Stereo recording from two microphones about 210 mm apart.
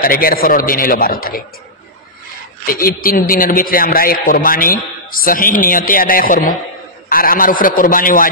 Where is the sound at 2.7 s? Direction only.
45° left (ahead or behind).